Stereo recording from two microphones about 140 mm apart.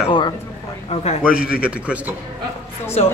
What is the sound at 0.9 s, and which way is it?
Speech, 45° left (ahead or behind).